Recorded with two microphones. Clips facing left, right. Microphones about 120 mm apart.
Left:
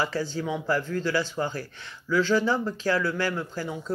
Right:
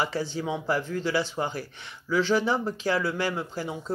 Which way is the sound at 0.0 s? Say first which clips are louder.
Even; 20° right (ahead or behind).